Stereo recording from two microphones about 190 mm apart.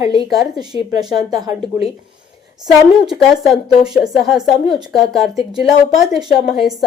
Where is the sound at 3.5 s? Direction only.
30° left (ahead or behind).